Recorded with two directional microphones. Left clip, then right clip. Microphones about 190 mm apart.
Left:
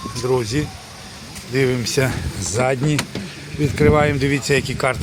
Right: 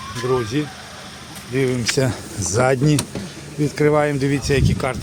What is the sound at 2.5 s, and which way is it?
Speech, 25° right (ahead or behind).